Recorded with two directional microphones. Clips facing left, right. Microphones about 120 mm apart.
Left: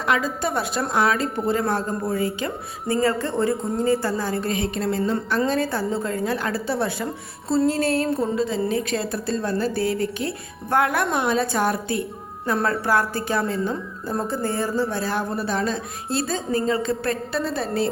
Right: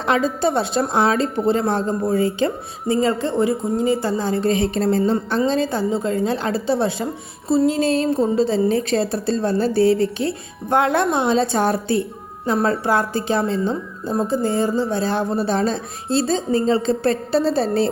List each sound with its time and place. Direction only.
0.0 s a woman's voice: 30° right (ahead or behind)
5.5 s a woman's voice: 20° right (ahead or behind)
7.4 s a woman's voice: 10° right (ahead or behind); by 17.8 s 30° right (ahead or behind)